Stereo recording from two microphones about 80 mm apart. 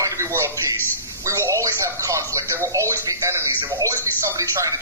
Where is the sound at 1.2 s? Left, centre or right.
Right.